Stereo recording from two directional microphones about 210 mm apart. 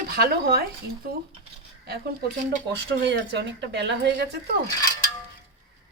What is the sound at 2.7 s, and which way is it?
A woman's voice, 55° right (ahead or behind).